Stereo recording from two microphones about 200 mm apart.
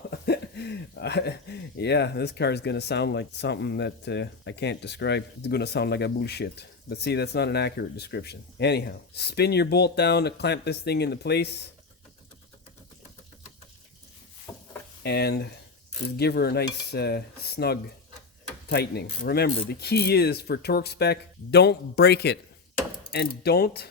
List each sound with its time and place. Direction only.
0.1 s speech: 55° left (ahead or behind)
14.5 s a sound: 15° left (ahead or behind)
15.0 s speech: 55° left (ahead or behind)